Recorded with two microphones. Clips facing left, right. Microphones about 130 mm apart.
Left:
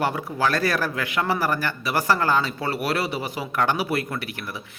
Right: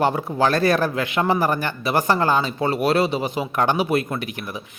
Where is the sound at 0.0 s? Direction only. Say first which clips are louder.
Right 4 dB; 30° right (ahead or behind).